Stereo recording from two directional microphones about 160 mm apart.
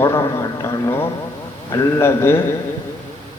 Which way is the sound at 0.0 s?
20° left (ahead or behind).